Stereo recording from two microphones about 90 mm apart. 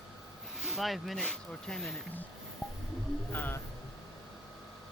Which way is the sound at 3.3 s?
20° left (ahead or behind).